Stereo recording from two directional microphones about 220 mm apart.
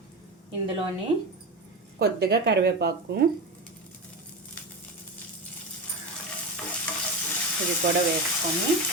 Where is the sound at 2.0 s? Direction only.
45° right (ahead or behind).